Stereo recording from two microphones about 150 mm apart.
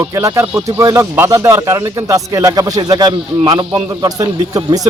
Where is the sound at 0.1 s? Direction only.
20° right (ahead or behind).